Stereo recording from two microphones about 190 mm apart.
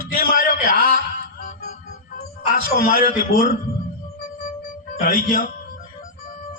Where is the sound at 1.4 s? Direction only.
40° left (ahead or behind).